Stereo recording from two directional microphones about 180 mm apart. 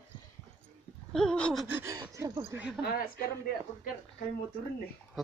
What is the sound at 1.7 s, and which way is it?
Speech, 15° right (ahead or behind).